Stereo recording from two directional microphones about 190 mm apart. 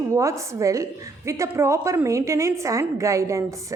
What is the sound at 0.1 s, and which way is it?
A woman's voice, 15° right (ahead or behind).